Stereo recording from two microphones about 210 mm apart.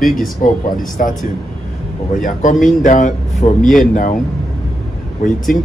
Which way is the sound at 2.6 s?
35° left (ahead or behind).